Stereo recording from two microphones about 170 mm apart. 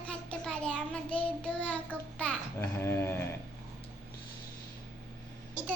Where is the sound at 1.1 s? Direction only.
5° left (ahead or behind).